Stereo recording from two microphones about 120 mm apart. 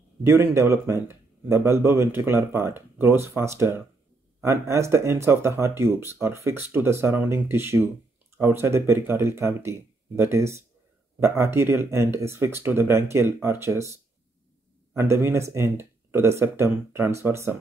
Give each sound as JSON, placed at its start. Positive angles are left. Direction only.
{"t": 0.2, "sound": "speech", "side_deg": -20}
{"t": 15.0, "sound": "speech", "side_deg": -20}